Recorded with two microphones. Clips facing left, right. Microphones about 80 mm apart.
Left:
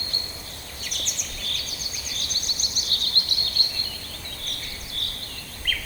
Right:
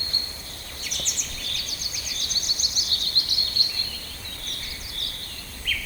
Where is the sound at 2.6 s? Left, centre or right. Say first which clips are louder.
Left 1 dB; left.